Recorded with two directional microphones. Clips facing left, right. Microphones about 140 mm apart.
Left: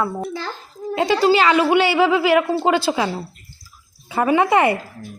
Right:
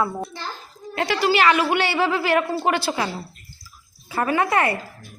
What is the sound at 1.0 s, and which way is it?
A woman's voice, 25° left (ahead or behind).